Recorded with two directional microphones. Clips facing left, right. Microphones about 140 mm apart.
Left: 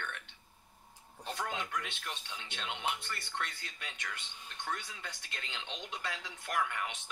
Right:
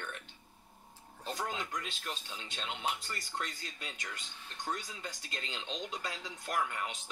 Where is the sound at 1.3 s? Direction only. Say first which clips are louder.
Even; 40° right (ahead or behind).